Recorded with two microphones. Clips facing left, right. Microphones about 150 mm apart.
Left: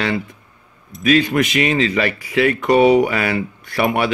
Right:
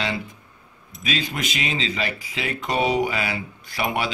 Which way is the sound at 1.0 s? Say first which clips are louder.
Left 12 dB; 60° left (ahead or behind).